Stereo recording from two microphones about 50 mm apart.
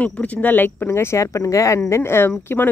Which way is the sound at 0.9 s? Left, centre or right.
Left.